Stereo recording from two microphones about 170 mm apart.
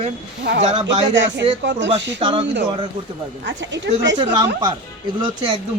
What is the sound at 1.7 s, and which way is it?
Speech, 90° right.